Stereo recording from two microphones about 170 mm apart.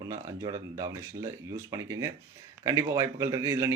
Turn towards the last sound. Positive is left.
turn(degrees=-15)  # may be behind; listen again after turning